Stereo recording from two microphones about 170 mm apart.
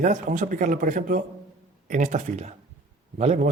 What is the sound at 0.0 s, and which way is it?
A man's voice, 50° right (ahead or behind).